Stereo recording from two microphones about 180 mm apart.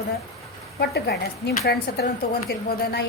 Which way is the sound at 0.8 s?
65° left (ahead or behind).